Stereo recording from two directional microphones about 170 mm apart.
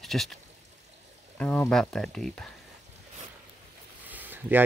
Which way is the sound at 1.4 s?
5° left (ahead or behind).